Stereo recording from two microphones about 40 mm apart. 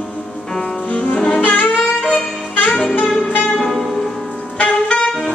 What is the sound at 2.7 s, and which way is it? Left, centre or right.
Saxophone, centre.